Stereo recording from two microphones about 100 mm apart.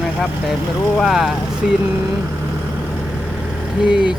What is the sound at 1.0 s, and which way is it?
Speech, 5° right (ahead or behind).